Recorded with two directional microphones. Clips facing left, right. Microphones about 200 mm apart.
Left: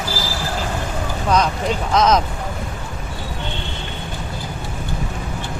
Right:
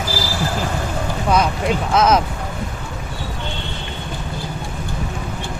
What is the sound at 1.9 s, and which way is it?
Speech, 5° right (ahead or behind).